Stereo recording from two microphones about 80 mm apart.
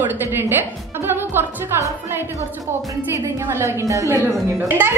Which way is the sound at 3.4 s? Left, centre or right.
Right.